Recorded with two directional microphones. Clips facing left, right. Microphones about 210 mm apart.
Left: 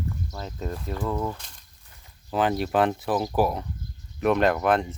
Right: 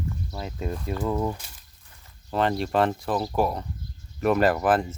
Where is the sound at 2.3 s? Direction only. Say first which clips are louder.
Even; centre (ahead or behind).